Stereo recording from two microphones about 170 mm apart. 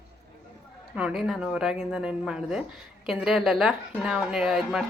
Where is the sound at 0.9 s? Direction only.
5° right (ahead or behind).